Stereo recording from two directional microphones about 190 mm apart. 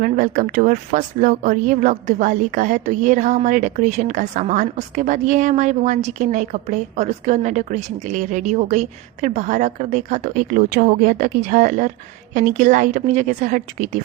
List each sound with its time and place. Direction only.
0.0 s a woman's voice: 45° right (ahead or behind)